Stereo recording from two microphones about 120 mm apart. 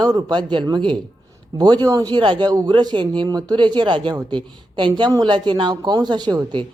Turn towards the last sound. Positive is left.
turn(degrees=-35)  # may be behind; listen again after turning